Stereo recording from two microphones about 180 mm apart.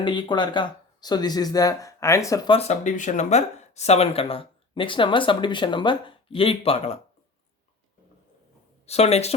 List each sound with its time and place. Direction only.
0.0 s speech: 25° left (ahead or behind)
2.6 s speech: 40° left (ahead or behind)
8.9 s speech: 35° left (ahead or behind)